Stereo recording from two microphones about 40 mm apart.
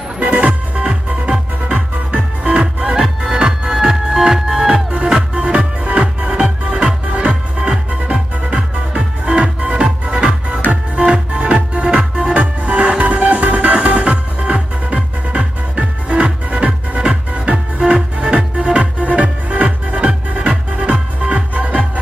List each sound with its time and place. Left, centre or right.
0.2 s music: right
2.9 s music: centre
12.4 s music: right